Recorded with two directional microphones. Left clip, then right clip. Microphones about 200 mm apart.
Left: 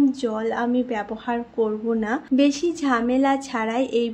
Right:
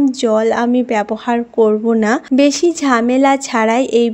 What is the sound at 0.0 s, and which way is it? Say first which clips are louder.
A woman's voice: right 9 dB; 40° right (ahead or behind).